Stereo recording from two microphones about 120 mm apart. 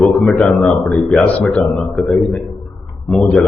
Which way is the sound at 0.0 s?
10° left (ahead or behind).